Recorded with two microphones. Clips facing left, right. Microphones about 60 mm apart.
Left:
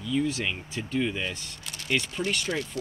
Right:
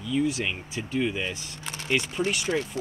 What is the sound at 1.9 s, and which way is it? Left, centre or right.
Speech, centre.